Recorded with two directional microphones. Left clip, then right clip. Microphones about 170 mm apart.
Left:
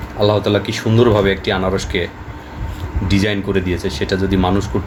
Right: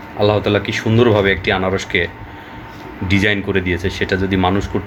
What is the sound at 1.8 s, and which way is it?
Speech, 50° left (ahead or behind).